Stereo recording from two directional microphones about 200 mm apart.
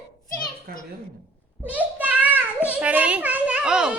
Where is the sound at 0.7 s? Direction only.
50° right (ahead or behind).